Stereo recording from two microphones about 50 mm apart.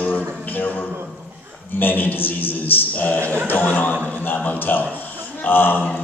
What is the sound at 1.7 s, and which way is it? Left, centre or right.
A man's voice, left.